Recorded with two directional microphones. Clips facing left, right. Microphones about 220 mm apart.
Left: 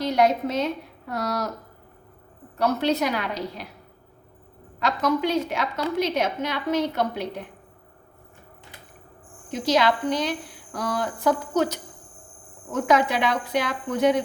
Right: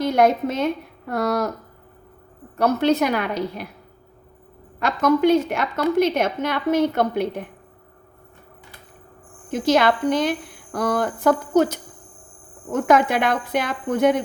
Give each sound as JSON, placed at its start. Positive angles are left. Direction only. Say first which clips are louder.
{"t": 0.0, "sound": "a woman's voice", "louder": "right 3 dB", "side_deg": -50}
{"t": 2.6, "sound": "a woman's voice", "louder": "right 4 dB", "side_deg": -50}
{"t": 4.8, "sound": "a woman's voice", "louder": "right 5 dB", "side_deg": -50}
{"t": 9.5, "sound": "a woman's voice", "louder": "right 3 dB", "side_deg": -50}